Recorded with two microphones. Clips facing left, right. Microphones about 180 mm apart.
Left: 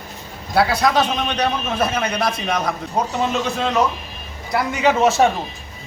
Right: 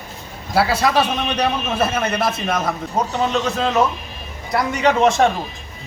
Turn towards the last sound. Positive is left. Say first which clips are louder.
# even
turn(degrees=5)  # may be behind; listen again after turning